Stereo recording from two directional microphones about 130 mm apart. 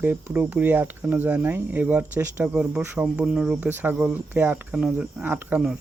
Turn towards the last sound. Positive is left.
turn(degrees=-10)  # may be behind; listen again after turning